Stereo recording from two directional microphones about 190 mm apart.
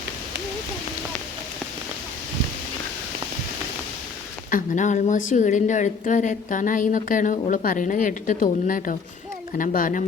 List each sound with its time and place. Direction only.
4.5 s a woman's voice: 40° left (ahead or behind)